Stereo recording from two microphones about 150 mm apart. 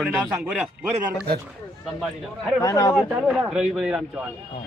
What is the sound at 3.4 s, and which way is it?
Speech, 5° right (ahead or behind).